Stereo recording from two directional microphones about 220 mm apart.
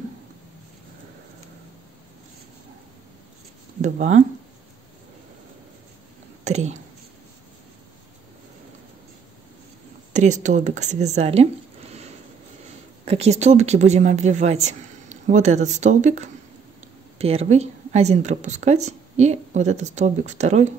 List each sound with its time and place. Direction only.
3.8 s a woman's voice: 30° right (ahead or behind)
6.4 s speech: 30° right (ahead or behind)
10.1 s a woman's voice: 35° right (ahead or behind)
13.0 s a woman's voice: 30° right (ahead or behind)